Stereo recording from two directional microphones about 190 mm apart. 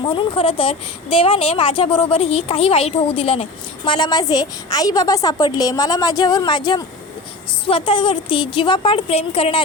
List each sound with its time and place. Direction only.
0.1 s a woman's voice: 30° left (ahead or behind)